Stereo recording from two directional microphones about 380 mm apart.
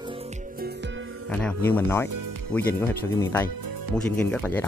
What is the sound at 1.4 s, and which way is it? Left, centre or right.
Speech, centre.